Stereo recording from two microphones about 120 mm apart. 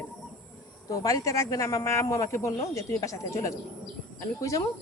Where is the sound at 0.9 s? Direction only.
30° left (ahead or behind).